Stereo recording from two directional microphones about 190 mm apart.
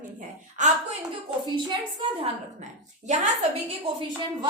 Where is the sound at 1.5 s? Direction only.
30° right (ahead or behind).